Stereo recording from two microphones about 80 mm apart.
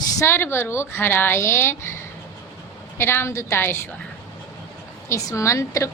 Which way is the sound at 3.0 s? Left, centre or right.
Left.